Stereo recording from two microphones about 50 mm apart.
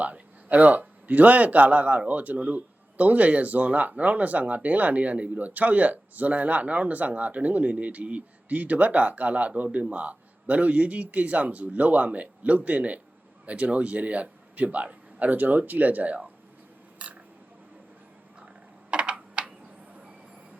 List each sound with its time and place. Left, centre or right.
0.0 s a man's voice: right
17.0 s a sound: right
18.9 s typing: right